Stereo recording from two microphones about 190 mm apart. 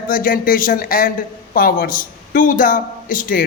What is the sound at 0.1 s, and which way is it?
A man's voice, 50° left (ahead or behind).